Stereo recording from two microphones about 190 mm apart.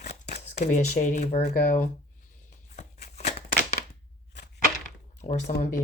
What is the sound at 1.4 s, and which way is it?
Speech, 50° left (ahead or behind).